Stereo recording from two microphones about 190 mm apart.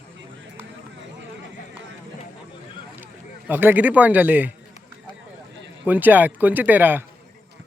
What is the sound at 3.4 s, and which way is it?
Speech, 10° right (ahead or behind).